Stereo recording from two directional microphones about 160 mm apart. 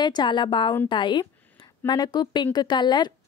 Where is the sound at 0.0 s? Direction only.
25° left (ahead or behind).